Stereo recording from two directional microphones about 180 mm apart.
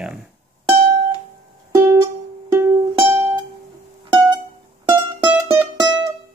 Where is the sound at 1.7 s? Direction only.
20° right (ahead or behind).